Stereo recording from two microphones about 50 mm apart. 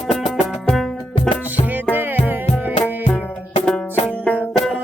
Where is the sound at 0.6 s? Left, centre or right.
Centre.